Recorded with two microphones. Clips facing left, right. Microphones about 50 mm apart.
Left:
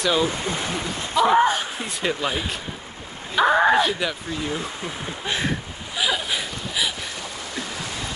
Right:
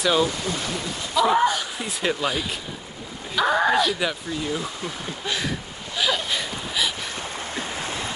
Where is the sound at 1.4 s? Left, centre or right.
Left.